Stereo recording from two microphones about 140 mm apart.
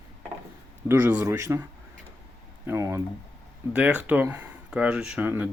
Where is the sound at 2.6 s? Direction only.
20° right (ahead or behind).